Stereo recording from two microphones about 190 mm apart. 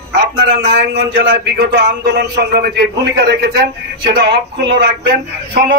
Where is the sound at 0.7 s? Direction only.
65° right (ahead or behind).